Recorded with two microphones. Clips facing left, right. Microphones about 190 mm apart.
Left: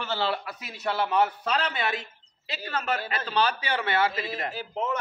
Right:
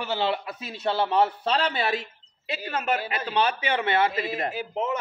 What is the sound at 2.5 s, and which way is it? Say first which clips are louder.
A man's voice: right 3 dB; 15° right (ahead or behind).